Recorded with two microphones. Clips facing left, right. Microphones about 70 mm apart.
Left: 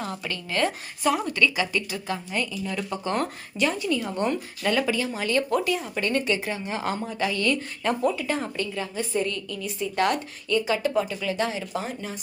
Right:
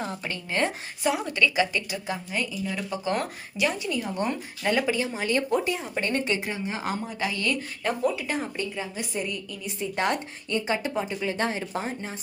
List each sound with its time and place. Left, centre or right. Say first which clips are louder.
0.0 s speech: left 1 dB; right